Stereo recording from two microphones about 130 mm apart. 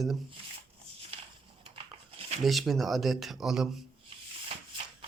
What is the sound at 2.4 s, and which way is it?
Speech, centre (ahead or behind).